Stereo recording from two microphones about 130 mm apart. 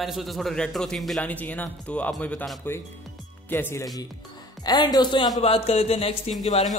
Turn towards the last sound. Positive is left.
turn(degrees=55)  # may be behind; listen again after turning